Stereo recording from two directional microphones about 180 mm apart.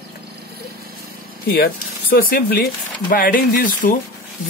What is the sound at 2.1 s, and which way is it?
Speech, 55° left (ahead or behind).